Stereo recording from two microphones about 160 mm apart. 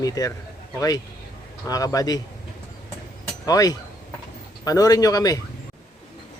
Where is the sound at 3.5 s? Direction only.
25° left (ahead or behind).